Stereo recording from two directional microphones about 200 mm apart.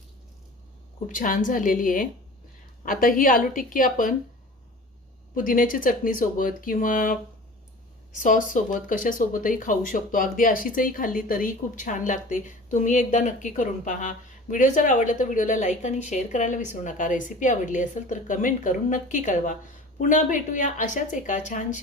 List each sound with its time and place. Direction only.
1.0 s speech: 40° left (ahead or behind)
5.3 s speech: 45° left (ahead or behind)
8.2 s speech: 40° left (ahead or behind)